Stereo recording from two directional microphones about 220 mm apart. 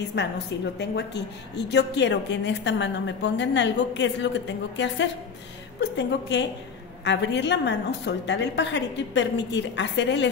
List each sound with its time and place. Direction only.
0.2 s a woman's voice: 50° left (ahead or behind)